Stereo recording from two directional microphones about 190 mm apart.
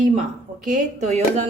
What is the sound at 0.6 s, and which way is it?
Speech, 35° right (ahead or behind).